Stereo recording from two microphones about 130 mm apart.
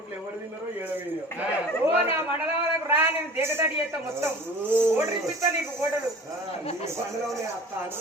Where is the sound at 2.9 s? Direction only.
15° right (ahead or behind).